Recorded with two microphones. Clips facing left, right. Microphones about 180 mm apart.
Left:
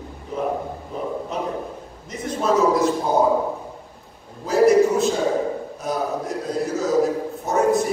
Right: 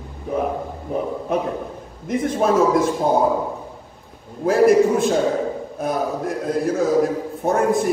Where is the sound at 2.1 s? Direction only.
55° right (ahead or behind).